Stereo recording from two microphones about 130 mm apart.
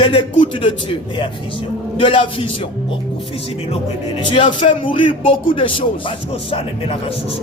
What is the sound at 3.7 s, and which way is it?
Speech, 45° left (ahead or behind).